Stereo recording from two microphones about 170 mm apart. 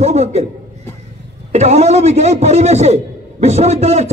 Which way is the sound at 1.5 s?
40° right (ahead or behind).